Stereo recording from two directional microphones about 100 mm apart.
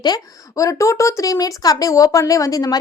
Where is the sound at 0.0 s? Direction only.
40° left (ahead or behind).